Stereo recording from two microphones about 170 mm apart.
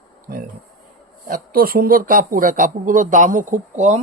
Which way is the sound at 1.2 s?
55° right (ahead or behind).